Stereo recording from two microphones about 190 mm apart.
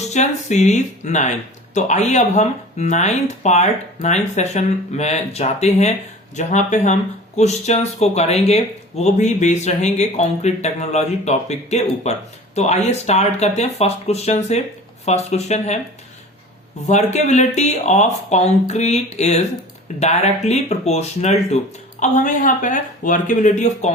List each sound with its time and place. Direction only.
0.1 s speech: 40° left (ahead or behind)
16.8 s speech: 35° left (ahead or behind)